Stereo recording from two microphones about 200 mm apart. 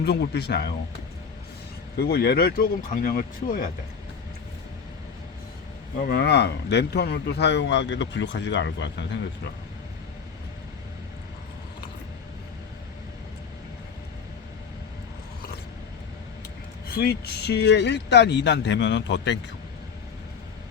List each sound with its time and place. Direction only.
0.0 s speech: 55° left (ahead or behind)
2.0 s speech: 50° left (ahead or behind)
6.0 s speech: 50° left (ahead or behind)
16.9 s speech: 50° left (ahead or behind)